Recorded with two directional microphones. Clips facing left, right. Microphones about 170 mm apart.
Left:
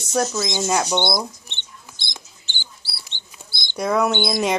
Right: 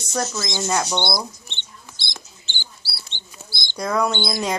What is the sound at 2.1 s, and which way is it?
Mouse, 15° left (ahead or behind).